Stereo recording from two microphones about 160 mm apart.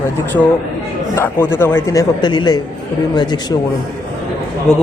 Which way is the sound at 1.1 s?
15° left (ahead or behind).